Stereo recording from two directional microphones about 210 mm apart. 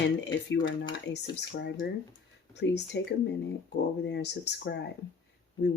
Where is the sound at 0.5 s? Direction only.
55° left (ahead or behind).